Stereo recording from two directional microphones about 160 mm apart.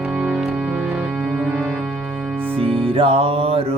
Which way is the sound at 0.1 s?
10° right (ahead or behind).